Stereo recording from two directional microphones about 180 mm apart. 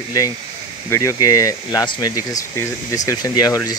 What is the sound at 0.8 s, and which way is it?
Speech, 15° left (ahead or behind).